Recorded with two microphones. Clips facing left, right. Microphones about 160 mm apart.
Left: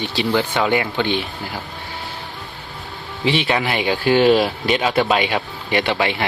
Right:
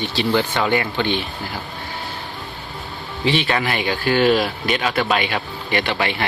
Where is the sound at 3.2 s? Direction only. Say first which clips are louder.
Left 1 dB; 20° left (ahead or behind).